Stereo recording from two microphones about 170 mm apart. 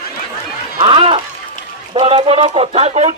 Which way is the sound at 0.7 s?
30° right (ahead or behind).